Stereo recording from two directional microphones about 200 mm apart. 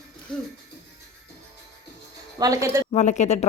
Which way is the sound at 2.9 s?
35° left (ahead or behind).